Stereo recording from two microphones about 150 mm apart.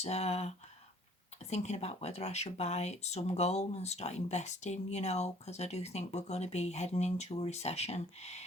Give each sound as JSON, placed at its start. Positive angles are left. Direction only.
{"t": 0.0, "sound": "speech", "side_deg": 45}